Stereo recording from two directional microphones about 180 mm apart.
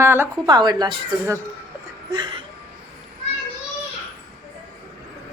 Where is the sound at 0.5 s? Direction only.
25° right (ahead or behind).